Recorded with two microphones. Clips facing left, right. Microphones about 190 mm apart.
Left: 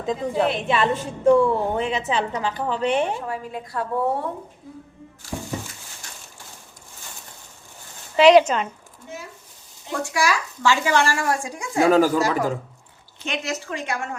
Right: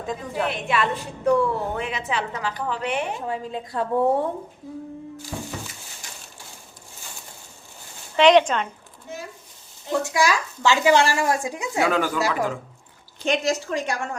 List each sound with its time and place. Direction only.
0.0 s a woman's voice: 25° left (ahead or behind)
3.2 s a woman's voice: 25° right (ahead or behind)
8.1 s speech: 10° left (ahead or behind)
10.0 s a woman's voice: 20° right (ahead or behind)
11.8 s speech: 40° left (ahead or behind)
13.2 s speech: 35° right (ahead or behind)